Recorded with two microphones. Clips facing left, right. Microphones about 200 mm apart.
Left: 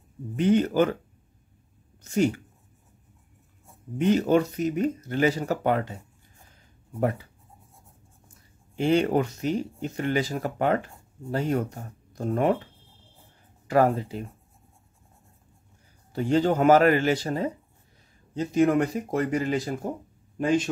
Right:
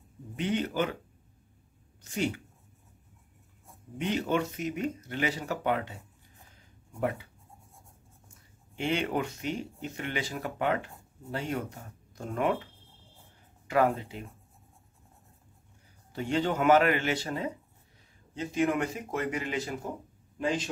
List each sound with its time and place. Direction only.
0.4 s speech: 45° left (ahead or behind)
2.0 s speech: 45° left (ahead or behind)
4.0 s speech: 45° left (ahead or behind)
8.7 s speech: 40° left (ahead or behind)
13.7 s speech: 35° left (ahead or behind)
16.1 s speech: 40° left (ahead or behind)